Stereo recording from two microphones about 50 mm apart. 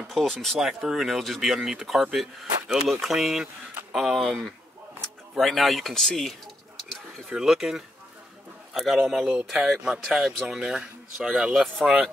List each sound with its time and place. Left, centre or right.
0.1 s speech: centre
0.6 s speech: centre
7.2 s speech: centre
11.8 s speech: centre